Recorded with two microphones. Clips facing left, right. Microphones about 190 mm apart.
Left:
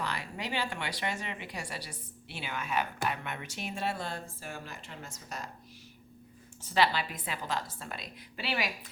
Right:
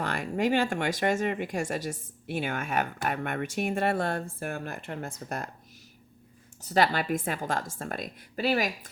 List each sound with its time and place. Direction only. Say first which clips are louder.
0.0 s speech: right 9 dB; 50° right (ahead or behind)
6.6 s speech: right 3 dB; 45° right (ahead or behind)